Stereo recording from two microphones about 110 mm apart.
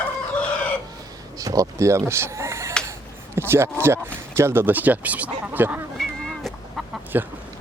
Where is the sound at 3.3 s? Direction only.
20° right (ahead or behind).